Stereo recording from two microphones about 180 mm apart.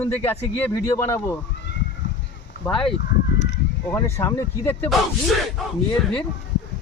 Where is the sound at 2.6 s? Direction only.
5° left (ahead or behind).